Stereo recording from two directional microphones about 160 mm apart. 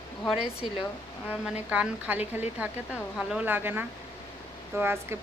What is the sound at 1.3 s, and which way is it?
A woman's voice, 5° right (ahead or behind).